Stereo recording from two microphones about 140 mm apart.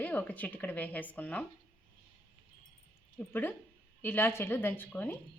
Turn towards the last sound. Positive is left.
turn(degrees=10)  # may be behind; listen again after turning